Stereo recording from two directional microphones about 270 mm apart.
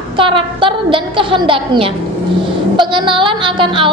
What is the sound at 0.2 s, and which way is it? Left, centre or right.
A woman's voice, centre.